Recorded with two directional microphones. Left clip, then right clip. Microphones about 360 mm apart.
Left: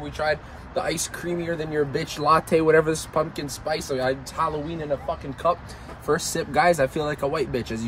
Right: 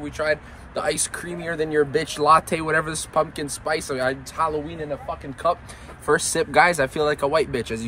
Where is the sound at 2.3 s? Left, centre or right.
Centre.